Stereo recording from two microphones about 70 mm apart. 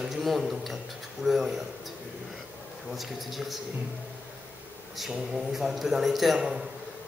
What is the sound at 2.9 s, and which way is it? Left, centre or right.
Speech, centre.